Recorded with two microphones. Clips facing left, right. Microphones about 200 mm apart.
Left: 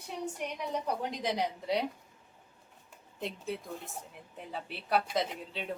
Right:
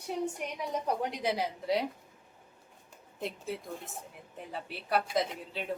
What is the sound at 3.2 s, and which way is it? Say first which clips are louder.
Speech: even; centre (ahead or behind).